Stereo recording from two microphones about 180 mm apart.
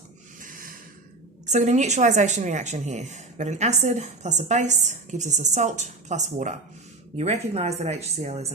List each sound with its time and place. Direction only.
0.3 s snort: 50° right (ahead or behind)
1.5 s a woman's voice: 40° right (ahead or behind)